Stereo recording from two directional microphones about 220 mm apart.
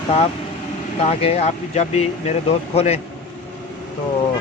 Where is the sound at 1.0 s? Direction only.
30° left (ahead or behind).